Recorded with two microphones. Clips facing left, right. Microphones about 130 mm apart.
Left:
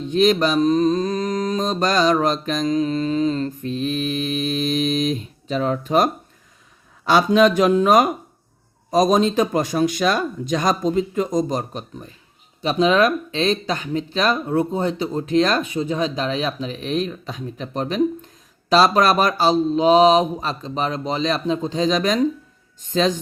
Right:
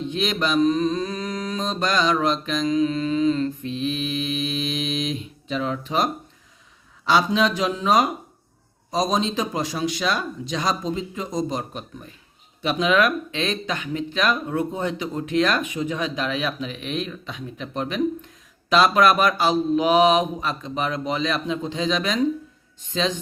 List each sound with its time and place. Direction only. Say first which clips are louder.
0.1 s mantra: left 8 dB; 40° left (ahead or behind)
12.6 s speech: left 3 dB; 35° left (ahead or behind)
22.8 s mantra: left 5 dB; 45° left (ahead or behind)